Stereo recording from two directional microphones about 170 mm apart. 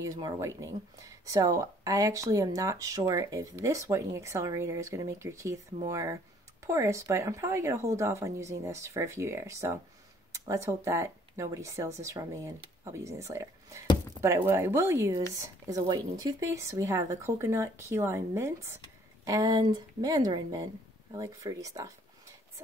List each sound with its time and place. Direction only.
0.0 s speech: 20° right (ahead or behind)